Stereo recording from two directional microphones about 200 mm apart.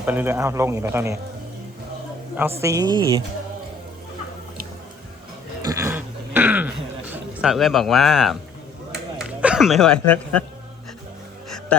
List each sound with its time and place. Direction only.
0.0 s speech: 10° right (ahead or behind)
2.6 s speech: 15° right (ahead or behind)
5.6 s a sound: 10° right (ahead or behind)
7.3 s speech: centre (ahead or behind)
8.9 s a sound: 5° right (ahead or behind)
11.4 s insect: centre (ahead or behind)